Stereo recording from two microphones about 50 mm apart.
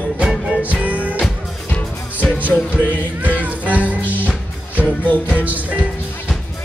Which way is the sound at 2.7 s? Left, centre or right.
Left.